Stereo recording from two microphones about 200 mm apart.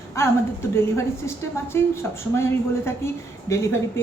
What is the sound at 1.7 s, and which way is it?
A woman's voice, 10° left (ahead or behind).